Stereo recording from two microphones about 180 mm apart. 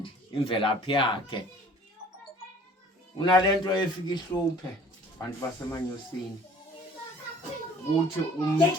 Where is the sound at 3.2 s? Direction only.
25° left (ahead or behind).